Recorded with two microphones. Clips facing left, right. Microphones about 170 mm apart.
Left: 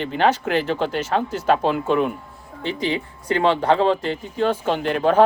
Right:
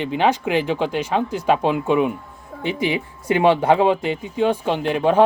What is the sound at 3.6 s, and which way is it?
Speech, 5° right (ahead or behind).